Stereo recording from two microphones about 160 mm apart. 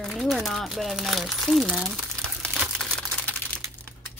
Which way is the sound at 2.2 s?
5° left (ahead or behind).